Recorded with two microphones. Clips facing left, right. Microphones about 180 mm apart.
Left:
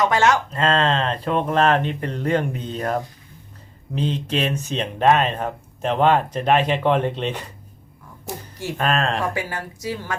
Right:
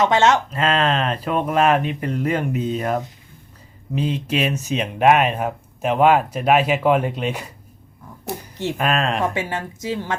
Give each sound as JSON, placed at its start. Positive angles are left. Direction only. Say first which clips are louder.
{"t": 0.0, "sound": "a woman's voice", "louder": "right 2 dB", "side_deg": -20}
{"t": 0.5, "sound": "speech", "louder": "even", "side_deg": -10}
{"t": 8.8, "sound": "speech", "louder": "even", "side_deg": -5}
{"t": 9.2, "sound": "a woman's voice", "louder": "right 3 dB", "side_deg": -20}